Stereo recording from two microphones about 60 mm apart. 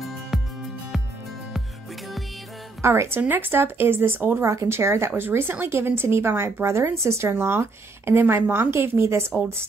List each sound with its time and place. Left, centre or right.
0.3 s music: centre
2.8 s a woman's voice: right
3.2 s speech: right
4.5 s a woman's voice: right